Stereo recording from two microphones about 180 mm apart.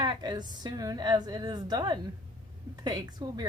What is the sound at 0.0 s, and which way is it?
Speech, 25° right (ahead or behind).